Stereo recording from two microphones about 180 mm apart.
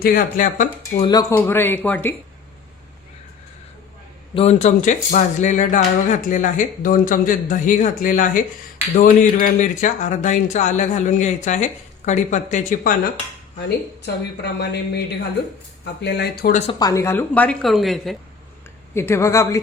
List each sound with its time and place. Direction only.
0.0 s speech: 50° left (ahead or behind)
1.0 s a woman's voice: 20° left (ahead or behind)
4.4 s speech: 40° left (ahead or behind)
13.6 s speech: 70° left (ahead or behind)
16.7 s a woman's voice: 20° left (ahead or behind); by 18.2 s centre (ahead or behind)
18.9 s a woman's voice: 15° left (ahead or behind)